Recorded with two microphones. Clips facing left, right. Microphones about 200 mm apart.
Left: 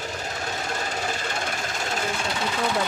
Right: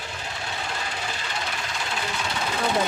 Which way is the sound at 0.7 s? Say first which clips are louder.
Left 4 dB; 45° left (ahead or behind).